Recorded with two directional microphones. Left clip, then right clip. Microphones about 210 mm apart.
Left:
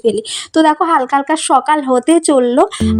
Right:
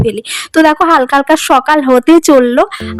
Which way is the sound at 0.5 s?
50° right (ahead or behind).